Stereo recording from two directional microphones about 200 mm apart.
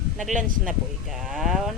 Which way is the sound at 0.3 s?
40° right (ahead or behind).